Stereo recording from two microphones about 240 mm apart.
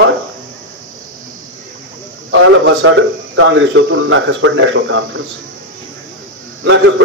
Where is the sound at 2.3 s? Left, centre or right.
Right.